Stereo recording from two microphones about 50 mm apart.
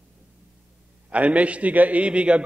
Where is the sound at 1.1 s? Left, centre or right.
Right.